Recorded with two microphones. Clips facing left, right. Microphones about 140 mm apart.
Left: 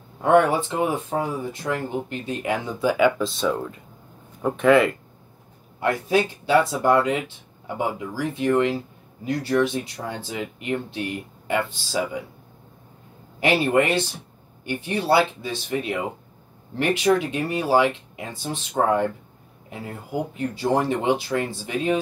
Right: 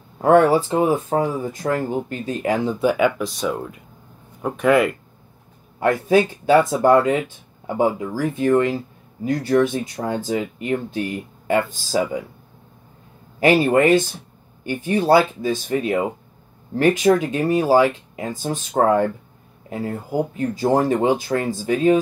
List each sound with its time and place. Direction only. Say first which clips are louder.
0.2 s speech: right 4 dB; 35° right (ahead or behind)
2.8 s speech: left 2 dB; 20° right (ahead or behind)
4.5 s speech: even; 5° right (ahead or behind)
5.8 s speech: right 5 dB; 50° right (ahead or behind)
13.4 s speech: right 5 dB; 45° right (ahead or behind)